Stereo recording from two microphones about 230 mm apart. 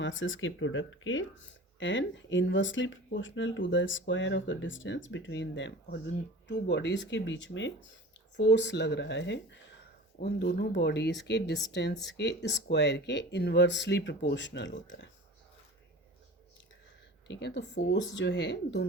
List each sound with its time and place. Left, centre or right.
0.0 s speech: left
17.2 s speech: left